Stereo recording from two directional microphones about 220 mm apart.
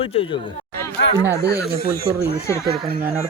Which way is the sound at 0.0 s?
25° left (ahead or behind).